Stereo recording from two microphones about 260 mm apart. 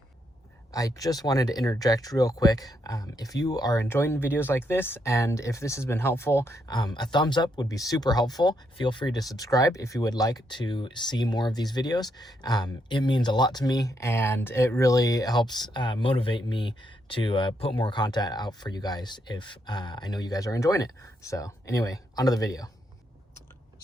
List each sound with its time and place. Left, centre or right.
0.7 s speech: centre